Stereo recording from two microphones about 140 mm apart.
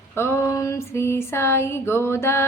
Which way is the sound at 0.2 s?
20° left (ahead or behind).